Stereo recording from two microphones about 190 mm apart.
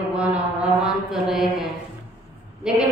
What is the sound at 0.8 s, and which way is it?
Mantra, centre (ahead or behind).